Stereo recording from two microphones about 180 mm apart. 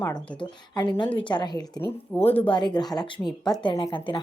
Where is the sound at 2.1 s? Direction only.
10° left (ahead or behind).